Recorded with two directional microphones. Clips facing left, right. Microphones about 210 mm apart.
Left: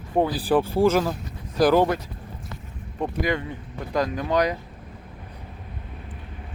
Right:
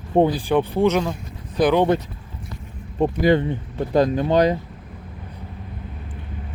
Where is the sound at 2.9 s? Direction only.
30° right (ahead or behind).